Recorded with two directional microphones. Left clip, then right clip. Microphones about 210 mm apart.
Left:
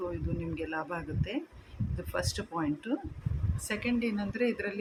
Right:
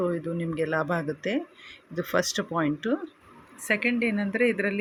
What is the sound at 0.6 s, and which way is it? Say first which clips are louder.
Speech: right 10 dB; 25° right (ahead or behind).